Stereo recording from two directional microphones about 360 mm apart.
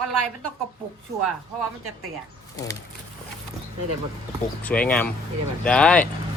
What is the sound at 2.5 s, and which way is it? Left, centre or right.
Speech, centre.